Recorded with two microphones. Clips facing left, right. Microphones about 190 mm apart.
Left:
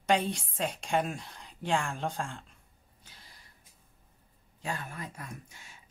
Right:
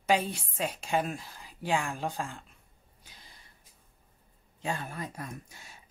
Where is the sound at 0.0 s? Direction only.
5° right (ahead or behind).